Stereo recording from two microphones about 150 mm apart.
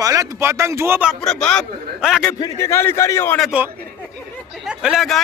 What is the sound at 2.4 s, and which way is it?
Speech, 20° left (ahead or behind).